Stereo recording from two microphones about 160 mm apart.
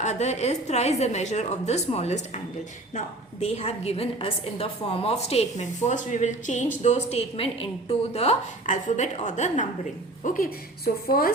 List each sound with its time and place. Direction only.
0.0 s a woman's voice: 45° left (ahead or behind)
3.4 s a woman's voice: 40° left (ahead or behind)
8.6 s a woman's voice: 50° left (ahead or behind)
10.2 s a woman's voice: 60° left (ahead or behind)